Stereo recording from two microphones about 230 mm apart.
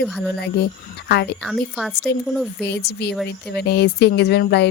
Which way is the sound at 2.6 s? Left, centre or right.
Left.